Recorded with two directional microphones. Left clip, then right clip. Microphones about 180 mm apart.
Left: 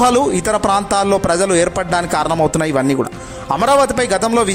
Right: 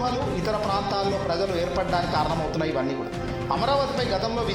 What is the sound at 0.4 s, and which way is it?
A man's voice, 50° left (ahead or behind).